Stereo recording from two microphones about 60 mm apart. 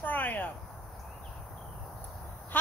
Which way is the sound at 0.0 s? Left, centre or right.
Left.